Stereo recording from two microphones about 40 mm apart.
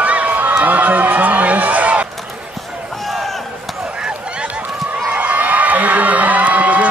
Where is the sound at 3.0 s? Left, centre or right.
Centre.